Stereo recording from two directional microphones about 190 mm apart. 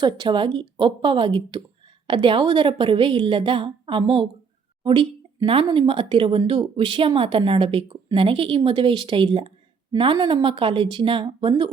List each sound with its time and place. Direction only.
0.0 s speech: 25° right (ahead or behind)